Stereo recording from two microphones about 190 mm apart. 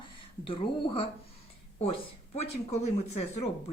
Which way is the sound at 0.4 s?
25° left (ahead or behind).